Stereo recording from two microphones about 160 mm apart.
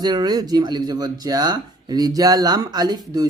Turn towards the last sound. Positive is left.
turn(degrees=-25)  # may be behind; listen again after turning